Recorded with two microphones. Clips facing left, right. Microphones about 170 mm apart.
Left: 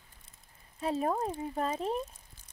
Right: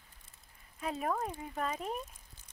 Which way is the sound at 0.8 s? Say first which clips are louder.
Left 4 dB; 30° left (ahead or behind).